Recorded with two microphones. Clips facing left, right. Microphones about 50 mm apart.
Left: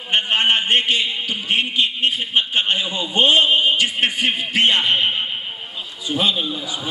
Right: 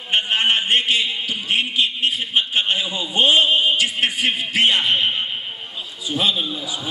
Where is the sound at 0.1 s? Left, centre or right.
Centre.